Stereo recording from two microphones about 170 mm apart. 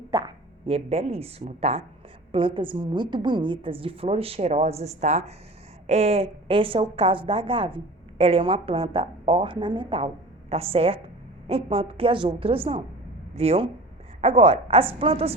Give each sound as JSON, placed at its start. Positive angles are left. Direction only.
{"t": 0.1, "sound": "a woman's voice", "side_deg": -25}